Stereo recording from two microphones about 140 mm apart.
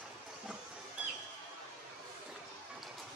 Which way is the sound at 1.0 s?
10° right (ahead or behind).